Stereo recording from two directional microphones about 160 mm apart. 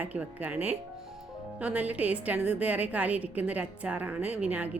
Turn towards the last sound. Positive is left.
turn(degrees=-10)  # may be behind; listen again after turning